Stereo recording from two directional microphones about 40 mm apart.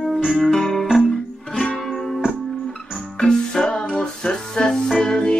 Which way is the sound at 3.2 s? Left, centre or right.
Centre.